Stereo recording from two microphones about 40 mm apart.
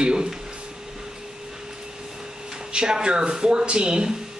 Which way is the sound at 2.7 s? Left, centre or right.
Right.